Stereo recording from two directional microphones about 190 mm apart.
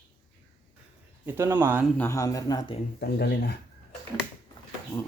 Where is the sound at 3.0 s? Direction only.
60° left (ahead or behind).